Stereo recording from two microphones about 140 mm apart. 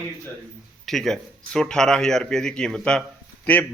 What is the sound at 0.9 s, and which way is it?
A man's voice, centre (ahead or behind).